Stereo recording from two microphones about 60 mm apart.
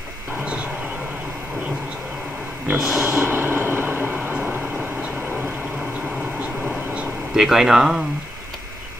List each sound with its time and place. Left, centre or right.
2.8 s speech: centre
3.1 s vehicle: right
7.3 s speech: centre